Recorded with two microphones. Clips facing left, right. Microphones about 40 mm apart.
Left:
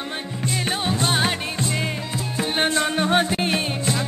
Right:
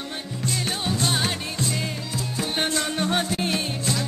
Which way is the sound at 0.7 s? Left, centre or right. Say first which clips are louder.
Left 3 dB; left.